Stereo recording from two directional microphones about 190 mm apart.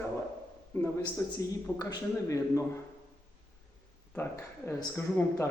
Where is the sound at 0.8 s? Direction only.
10° left (ahead or behind).